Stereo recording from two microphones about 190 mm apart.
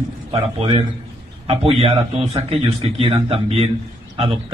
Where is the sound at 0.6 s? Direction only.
30° right (ahead or behind).